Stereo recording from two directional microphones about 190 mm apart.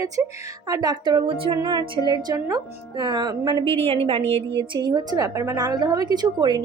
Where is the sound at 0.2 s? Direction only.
15° right (ahead or behind).